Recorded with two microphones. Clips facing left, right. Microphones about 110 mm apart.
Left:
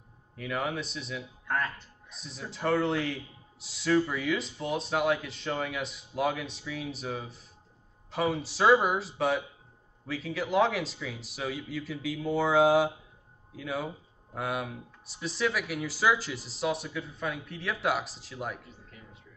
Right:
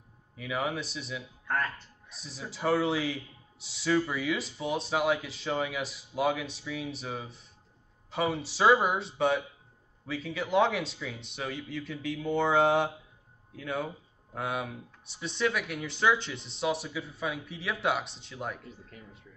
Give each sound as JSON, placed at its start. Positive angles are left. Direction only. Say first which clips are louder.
{"t": 0.4, "sound": "speech", "louder": "even", "side_deg": 0}